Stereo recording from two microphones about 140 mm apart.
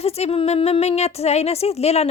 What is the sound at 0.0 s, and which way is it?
Speech, 45° left (ahead or behind).